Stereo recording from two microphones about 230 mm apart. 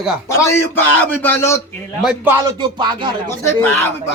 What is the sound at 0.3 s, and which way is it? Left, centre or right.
A man's voice, centre.